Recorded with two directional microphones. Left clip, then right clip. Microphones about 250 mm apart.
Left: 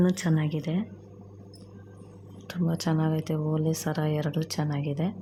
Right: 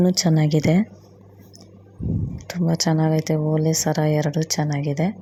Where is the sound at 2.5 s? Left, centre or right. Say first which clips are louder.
Right 7 dB; centre.